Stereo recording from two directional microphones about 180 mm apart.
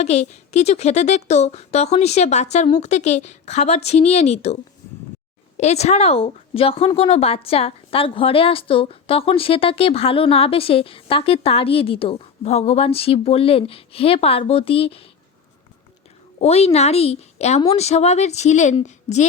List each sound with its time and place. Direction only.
0.0 s speech: 35° left (ahead or behind)
5.5 s speech: 35° left (ahead or behind)
16.4 s speech: 35° left (ahead or behind)